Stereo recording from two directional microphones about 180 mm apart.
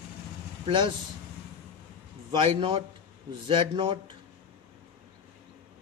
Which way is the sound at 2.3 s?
30° right (ahead or behind).